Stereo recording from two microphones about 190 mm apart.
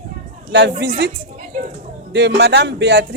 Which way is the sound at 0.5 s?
65° right (ahead or behind).